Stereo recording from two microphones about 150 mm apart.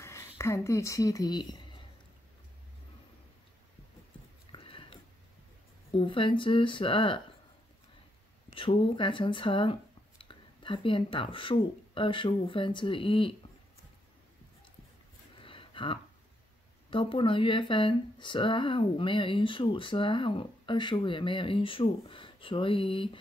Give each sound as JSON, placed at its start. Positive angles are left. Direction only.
{"t": 0.0, "sound": "speech", "side_deg": 20}
{"t": 4.5, "sound": "whispering", "side_deg": 35}
{"t": 5.9, "sound": "speech", "side_deg": 35}
{"t": 8.5, "sound": "speech", "side_deg": 35}
{"t": 15.3, "sound": "a sound", "side_deg": 35}
{"t": 16.9, "sound": "speech", "side_deg": 35}